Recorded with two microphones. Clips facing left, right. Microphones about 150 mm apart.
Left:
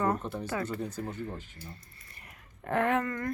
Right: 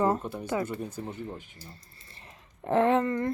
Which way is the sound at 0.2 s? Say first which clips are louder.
Right 3 dB; 10° right (ahead or behind).